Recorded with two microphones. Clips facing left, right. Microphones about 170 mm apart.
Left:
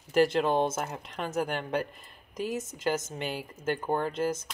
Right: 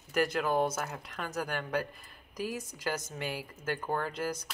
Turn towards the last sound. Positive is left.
turn(degrees=20)  # may be behind; listen again after turning